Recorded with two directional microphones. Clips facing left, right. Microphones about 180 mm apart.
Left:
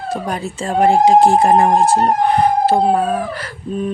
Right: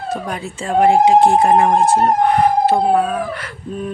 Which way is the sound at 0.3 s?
35° left (ahead or behind).